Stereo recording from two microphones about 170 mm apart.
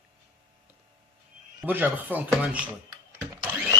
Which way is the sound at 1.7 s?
10° right (ahead or behind).